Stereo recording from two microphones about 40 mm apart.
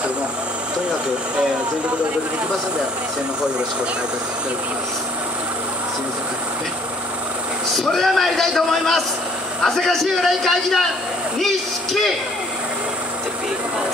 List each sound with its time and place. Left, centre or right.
7.7 s a man's voice: centre